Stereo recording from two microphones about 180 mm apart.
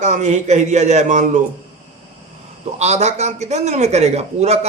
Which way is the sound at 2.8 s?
40° right (ahead or behind).